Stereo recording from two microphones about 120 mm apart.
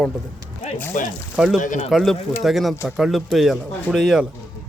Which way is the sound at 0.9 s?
90° left.